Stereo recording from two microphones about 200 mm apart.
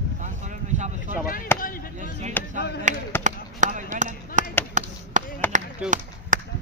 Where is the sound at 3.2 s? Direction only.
40° right (ahead or behind).